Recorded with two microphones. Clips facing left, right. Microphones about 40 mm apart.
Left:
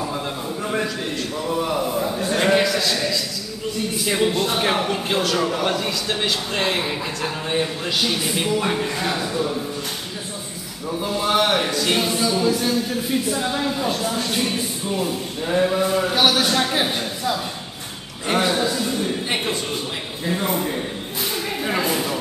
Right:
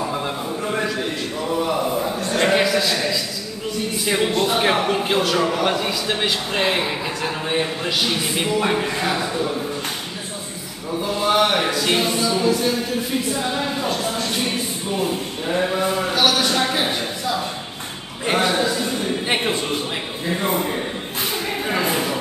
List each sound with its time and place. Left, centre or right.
0.7 s a sound: centre
3.9 s a man's voice: centre
10.9 s music: centre
13.3 s a man's voice: centre
14.1 s music: centre
14.4 s a man's voice: centre
16.2 s music: centre
18.3 s a man's voice: centre
21.6 s a sound: centre